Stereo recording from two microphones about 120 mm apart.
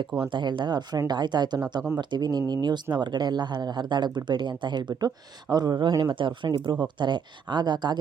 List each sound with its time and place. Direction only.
0.3 s speech: 40° right (ahead or behind)